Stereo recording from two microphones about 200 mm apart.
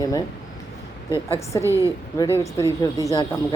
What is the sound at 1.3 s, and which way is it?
Speech, 15° left (ahead or behind).